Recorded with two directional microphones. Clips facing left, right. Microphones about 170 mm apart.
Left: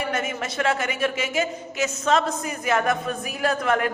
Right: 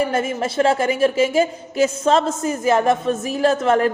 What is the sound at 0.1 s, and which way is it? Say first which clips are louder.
A woman's voice: right 6 dB; 30° right (ahead or behind).